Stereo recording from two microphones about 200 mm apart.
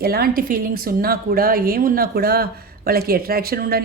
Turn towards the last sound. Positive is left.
turn(degrees=-50)  # may be behind; listen again after turning